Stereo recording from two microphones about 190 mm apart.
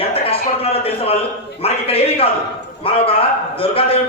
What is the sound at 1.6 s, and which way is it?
A man's voice, 30° left (ahead or behind).